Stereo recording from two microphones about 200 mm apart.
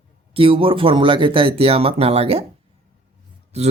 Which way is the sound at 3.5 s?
30° right (ahead or behind).